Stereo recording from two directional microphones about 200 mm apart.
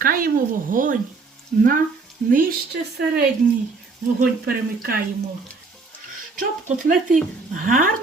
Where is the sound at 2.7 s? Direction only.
50° right (ahead or behind).